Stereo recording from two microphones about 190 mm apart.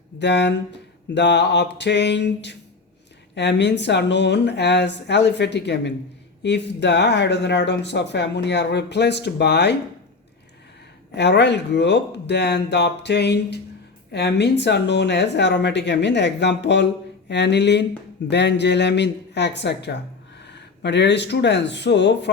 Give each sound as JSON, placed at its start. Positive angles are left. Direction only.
{"t": 0.2, "sound": "speech", "side_deg": 65}
{"t": 11.1, "sound": "speech", "side_deg": 65}